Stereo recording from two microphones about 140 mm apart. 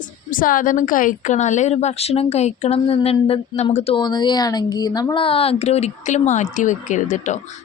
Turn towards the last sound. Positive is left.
turn(degrees=60)  # may be behind; listen again after turning